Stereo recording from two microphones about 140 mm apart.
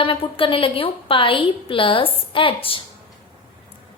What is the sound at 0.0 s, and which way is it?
A woman's voice, 40° left (ahead or behind).